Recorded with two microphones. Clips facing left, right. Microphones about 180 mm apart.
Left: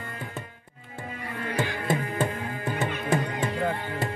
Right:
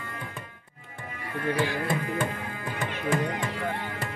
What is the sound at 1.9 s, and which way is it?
Music, 25° left (ahead or behind).